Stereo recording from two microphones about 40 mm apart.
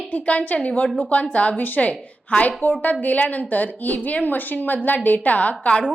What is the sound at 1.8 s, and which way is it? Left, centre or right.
A woman's voice, left.